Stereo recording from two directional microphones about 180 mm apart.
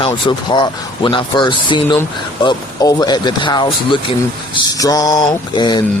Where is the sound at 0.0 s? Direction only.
25° left (ahead or behind).